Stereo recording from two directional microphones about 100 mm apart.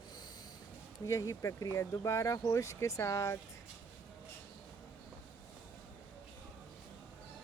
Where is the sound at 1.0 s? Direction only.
30° left (ahead or behind).